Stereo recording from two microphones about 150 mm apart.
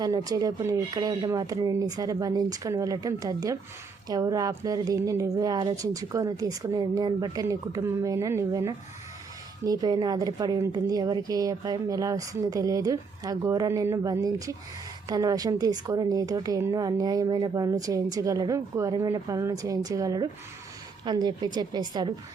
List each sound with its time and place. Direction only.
0.0 s a woman's voice: 25° right (ahead or behind)